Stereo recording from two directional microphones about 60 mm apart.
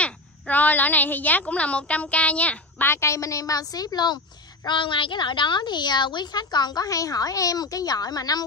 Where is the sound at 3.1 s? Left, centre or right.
Left.